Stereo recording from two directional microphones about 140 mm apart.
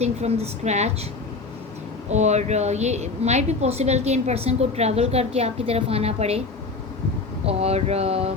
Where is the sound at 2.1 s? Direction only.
55° right (ahead or behind).